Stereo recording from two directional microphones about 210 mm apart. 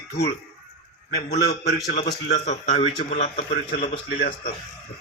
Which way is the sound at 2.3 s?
35° left (ahead or behind).